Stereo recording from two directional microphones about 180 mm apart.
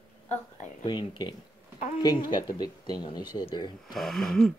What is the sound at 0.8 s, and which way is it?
Speech, 25° left (ahead or behind).